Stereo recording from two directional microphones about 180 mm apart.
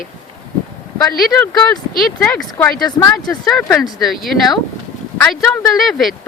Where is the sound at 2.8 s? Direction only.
20° left (ahead or behind).